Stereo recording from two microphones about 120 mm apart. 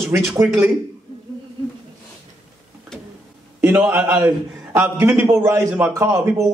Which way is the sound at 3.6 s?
20° right (ahead or behind).